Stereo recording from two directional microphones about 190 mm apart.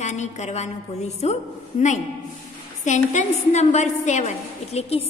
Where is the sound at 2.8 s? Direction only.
40° left (ahead or behind).